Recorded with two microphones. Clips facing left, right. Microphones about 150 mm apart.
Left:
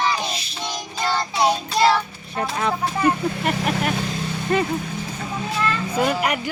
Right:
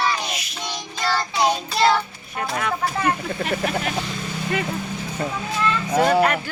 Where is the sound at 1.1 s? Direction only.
Centre (ahead or behind).